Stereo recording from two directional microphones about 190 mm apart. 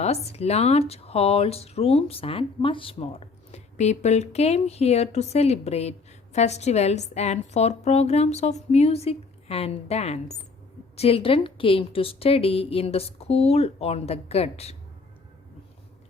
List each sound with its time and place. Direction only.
0.0 s speech: 35° left (ahead or behind)